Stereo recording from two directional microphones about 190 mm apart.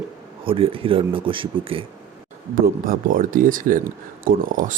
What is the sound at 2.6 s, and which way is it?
Speech, 50° right (ahead or behind).